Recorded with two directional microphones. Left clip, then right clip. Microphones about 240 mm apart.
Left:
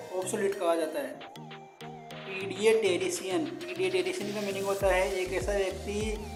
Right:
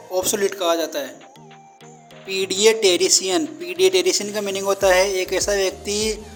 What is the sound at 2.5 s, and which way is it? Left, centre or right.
A woman's voice, right.